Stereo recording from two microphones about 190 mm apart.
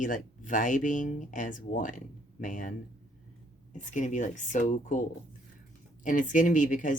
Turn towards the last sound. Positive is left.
turn(degrees=40)  # may be behind; listen again after turning